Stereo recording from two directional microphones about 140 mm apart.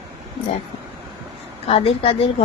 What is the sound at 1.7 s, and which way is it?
Speech, 45° left (ahead or behind).